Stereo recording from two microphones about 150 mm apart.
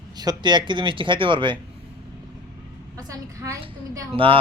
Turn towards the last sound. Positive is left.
turn(degrees=-35)  # may be behind; listen again after turning